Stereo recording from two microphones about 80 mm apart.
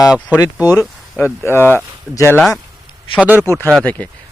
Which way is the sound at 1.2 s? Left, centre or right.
Left.